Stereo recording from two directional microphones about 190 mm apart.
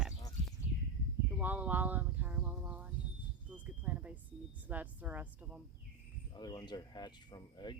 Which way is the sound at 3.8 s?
10° right (ahead or behind).